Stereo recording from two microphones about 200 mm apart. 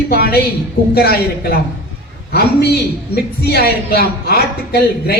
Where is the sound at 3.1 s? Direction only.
50° left (ahead or behind).